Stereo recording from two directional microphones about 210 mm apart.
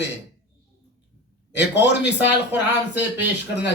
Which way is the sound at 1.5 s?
55° left (ahead or behind).